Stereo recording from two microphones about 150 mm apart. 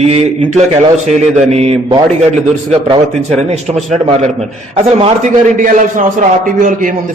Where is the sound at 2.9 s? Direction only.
45° right (ahead or behind).